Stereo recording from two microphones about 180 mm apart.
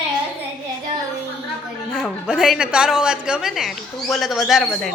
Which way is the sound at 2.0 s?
5° right (ahead or behind).